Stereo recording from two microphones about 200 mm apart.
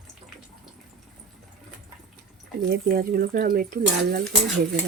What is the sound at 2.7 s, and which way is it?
Speech, 50° right (ahead or behind).